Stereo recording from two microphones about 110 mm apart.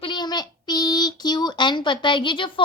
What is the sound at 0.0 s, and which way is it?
A child's voice, 45° left (ahead or behind).